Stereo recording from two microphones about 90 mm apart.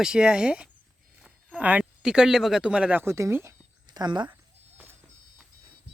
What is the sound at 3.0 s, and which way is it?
Speech, 30° right (ahead or behind).